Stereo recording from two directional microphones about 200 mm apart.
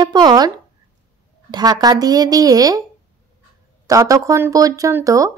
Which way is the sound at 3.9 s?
15° right (ahead or behind).